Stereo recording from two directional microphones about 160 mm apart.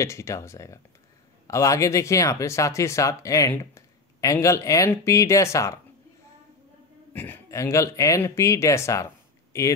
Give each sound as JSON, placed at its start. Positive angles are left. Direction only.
{"t": 0.0, "sound": "speech", "side_deg": 20}
{"t": 7.2, "sound": "speech", "side_deg": 10}